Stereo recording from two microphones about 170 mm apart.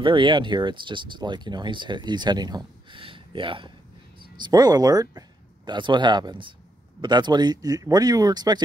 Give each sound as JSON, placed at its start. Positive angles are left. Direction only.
{"t": 0.0, "sound": "speech", "side_deg": -30}